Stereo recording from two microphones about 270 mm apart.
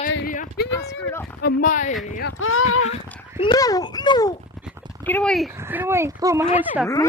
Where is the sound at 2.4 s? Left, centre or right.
Left.